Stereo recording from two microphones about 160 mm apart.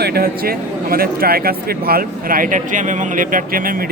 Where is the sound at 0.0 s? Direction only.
75° right (ahead or behind).